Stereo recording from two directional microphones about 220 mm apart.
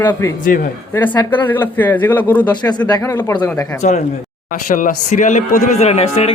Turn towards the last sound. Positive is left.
turn(degrees=30)  # may be behind; listen again after turning